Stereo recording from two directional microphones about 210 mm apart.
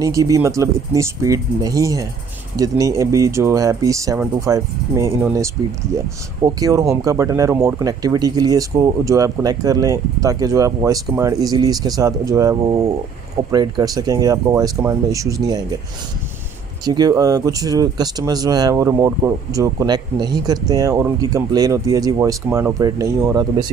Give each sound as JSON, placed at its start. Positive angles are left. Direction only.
{"t": 0.0, "sound": "speech", "side_deg": -15}
{"t": 16.8, "sound": "speech", "side_deg": -20}